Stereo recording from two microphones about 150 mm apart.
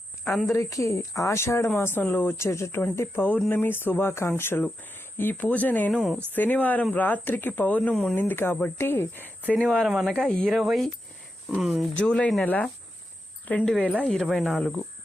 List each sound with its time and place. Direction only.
0.3 s speech: centre (ahead or behind)
0.5 s speech: 20° left (ahead or behind)
9.6 s speech: centre (ahead or behind)